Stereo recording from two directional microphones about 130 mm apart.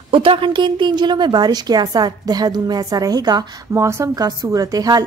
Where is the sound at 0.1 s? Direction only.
40° right (ahead or behind).